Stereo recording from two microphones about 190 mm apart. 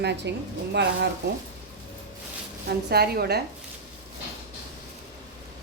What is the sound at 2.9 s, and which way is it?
Speech, 55° right (ahead or behind).